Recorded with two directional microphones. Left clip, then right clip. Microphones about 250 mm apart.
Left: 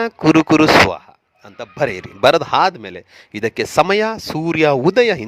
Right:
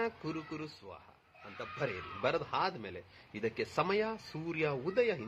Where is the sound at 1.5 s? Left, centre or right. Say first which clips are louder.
Left 18 dB; left.